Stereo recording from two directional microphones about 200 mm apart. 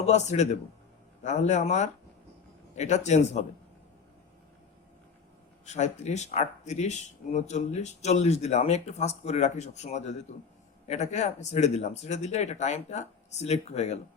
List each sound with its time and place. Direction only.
0.0 s speech: 35° left (ahead or behind)
5.6 s speech: 35° left (ahead or behind)